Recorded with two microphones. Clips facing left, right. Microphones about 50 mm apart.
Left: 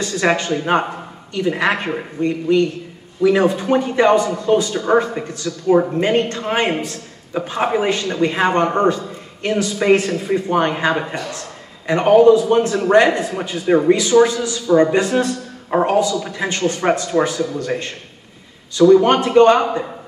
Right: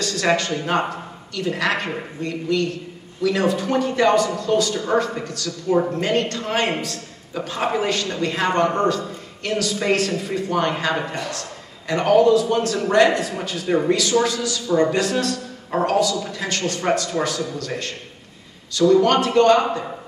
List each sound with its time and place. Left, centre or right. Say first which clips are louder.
0.0 s a man's voice: left 2 dB; left